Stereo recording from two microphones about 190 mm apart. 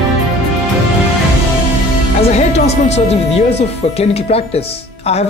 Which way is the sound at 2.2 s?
35° left (ahead or behind).